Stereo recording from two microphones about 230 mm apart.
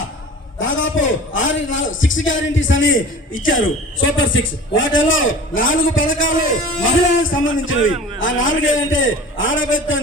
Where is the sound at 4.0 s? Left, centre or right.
Left.